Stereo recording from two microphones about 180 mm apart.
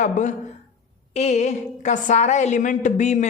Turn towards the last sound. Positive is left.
turn(degrees=40)  # may be behind; listen again after turning